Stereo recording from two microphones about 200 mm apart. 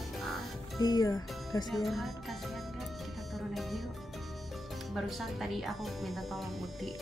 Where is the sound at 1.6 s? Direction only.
Centre (ahead or behind).